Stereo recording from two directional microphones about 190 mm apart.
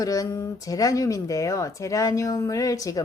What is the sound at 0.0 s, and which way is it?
Speech, 20° left (ahead or behind).